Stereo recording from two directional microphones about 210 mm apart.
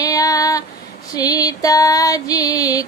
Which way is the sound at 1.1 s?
20° left (ahead or behind).